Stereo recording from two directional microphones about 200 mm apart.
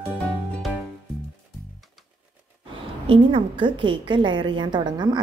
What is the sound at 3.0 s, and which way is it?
A woman's voice, 25° right (ahead or behind).